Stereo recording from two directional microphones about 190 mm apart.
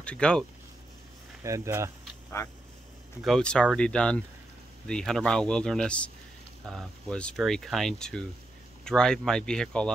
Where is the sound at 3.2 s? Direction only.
5° left (ahead or behind).